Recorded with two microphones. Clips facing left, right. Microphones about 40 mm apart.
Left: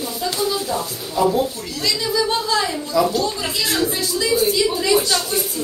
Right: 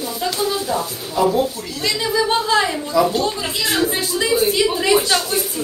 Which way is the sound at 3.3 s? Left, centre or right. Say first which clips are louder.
Even; centre.